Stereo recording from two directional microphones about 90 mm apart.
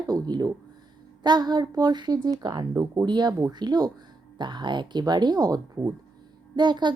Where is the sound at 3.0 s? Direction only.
55° right (ahead or behind).